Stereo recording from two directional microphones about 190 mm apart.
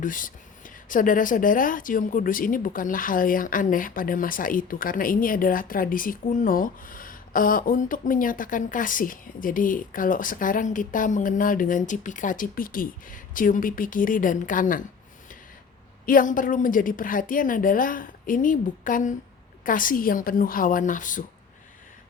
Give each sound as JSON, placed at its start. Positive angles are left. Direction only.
{"t": 0.0, "sound": "speech", "side_deg": 45}
{"t": 16.0, "sound": "speech", "side_deg": 45}